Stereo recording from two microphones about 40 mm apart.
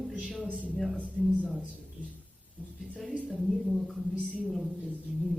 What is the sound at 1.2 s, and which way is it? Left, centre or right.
Speech, centre.